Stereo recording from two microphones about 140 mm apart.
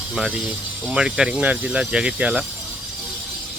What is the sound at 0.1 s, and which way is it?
Speech, 5° right (ahead or behind).